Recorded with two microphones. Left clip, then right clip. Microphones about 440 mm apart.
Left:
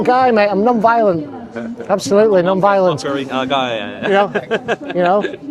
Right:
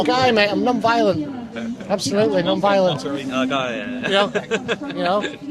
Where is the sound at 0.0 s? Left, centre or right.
Left.